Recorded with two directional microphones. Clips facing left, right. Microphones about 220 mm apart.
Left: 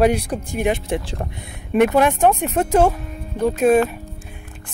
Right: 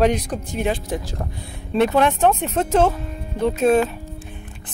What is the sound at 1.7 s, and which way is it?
A woman's voice, 15° left (ahead or behind).